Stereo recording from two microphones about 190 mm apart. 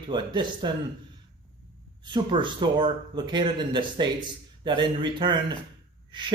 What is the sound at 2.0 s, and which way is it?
Speech, 25° right (ahead or behind).